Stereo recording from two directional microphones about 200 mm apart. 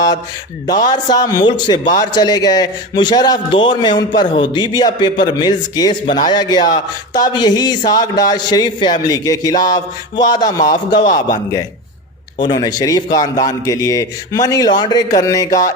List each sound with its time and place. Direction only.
0.7 s a man's voice: 20° left (ahead or behind)